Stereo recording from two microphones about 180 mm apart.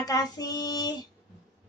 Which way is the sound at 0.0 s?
20° left (ahead or behind).